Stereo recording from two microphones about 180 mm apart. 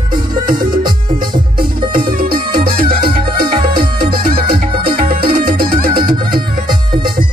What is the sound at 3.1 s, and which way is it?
Music, 30° right (ahead or behind).